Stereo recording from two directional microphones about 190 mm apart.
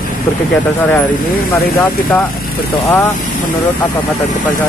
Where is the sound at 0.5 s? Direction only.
10° left (ahead or behind).